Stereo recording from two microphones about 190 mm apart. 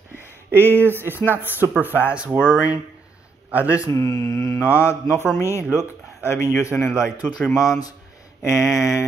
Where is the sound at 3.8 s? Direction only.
15° left (ahead or behind).